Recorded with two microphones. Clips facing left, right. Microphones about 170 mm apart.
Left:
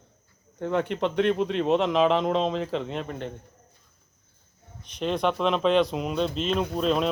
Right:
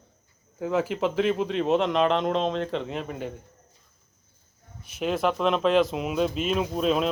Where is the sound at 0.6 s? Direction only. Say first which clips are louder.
Even; 5° right (ahead or behind).